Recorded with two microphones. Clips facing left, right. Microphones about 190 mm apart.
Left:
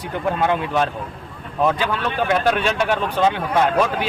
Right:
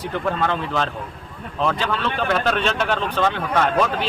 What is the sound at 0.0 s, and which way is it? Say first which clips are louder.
Speech: left 2 dB; 15° left (ahead or behind).